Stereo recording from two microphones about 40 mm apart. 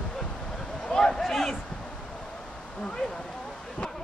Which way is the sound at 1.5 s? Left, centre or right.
Left.